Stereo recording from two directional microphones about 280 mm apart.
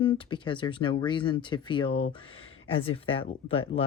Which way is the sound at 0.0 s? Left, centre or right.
Centre.